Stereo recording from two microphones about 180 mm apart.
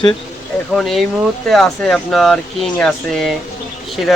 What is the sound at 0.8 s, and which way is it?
Speech, centre (ahead or behind).